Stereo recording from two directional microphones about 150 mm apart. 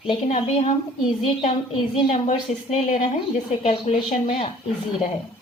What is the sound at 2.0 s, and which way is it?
Speech, 45° left (ahead or behind).